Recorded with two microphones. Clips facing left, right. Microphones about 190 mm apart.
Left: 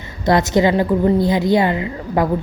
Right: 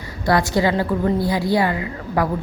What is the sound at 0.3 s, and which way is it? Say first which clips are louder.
A woman's voice: left 3 dB; 20° left (ahead or behind).